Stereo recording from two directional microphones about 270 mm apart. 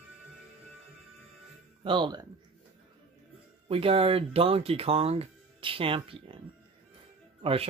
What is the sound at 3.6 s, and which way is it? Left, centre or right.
Speech, right.